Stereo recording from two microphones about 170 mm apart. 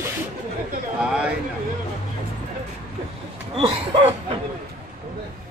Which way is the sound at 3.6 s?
35° right (ahead or behind).